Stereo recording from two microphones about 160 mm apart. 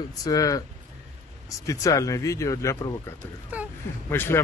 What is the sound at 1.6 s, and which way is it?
A man's voice, 20° left (ahead or behind).